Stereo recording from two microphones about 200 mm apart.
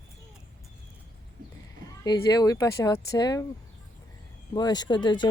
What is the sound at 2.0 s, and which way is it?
Speech, 20° left (ahead or behind).